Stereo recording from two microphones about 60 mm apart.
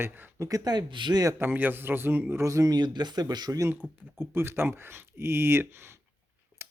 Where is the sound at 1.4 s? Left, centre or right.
Right.